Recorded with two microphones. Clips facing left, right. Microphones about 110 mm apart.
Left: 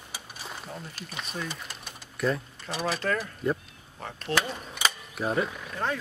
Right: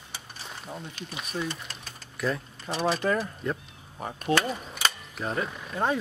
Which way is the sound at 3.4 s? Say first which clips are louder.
Left 3 dB; 5° left (ahead or behind).